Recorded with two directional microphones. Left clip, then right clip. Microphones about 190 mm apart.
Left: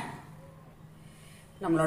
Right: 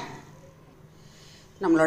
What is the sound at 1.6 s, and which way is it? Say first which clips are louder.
Speech: right 6 dB; 40° right (ahead or behind).